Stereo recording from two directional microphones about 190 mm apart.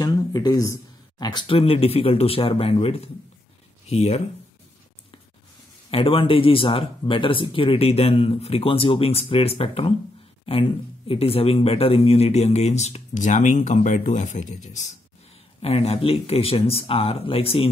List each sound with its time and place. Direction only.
0.0 s speech: 20° left (ahead or behind)
5.9 s speech: 30° left (ahead or behind)